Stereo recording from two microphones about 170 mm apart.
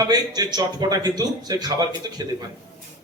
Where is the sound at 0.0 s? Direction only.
20° right (ahead or behind).